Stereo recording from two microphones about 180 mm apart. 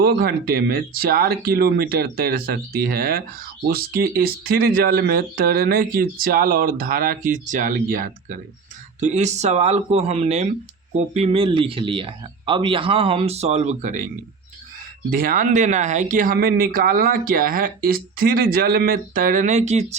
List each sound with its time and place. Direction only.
0.0 s speech: 55° right (ahead or behind)
15.1 s speech: 50° right (ahead or behind)